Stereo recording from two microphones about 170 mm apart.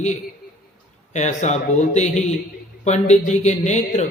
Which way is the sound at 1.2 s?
45° left (ahead or behind).